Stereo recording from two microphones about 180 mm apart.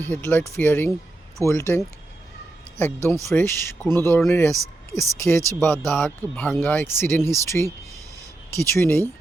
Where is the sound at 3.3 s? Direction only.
15° left (ahead or behind).